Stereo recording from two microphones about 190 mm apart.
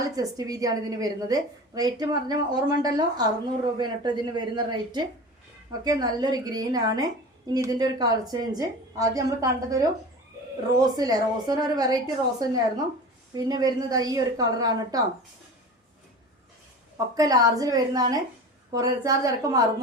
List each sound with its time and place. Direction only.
0.2 s a woman's voice: 20° right (ahead or behind)
17.2 s a woman's voice: 20° right (ahead or behind)